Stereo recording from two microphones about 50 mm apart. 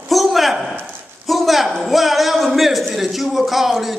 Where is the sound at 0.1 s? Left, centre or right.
Centre.